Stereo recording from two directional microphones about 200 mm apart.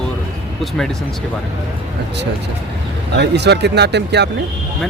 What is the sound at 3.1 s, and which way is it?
Speech, 60° right (ahead or behind).